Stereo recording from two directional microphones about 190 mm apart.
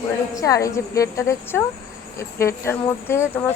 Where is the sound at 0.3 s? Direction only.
15° left (ahead or behind).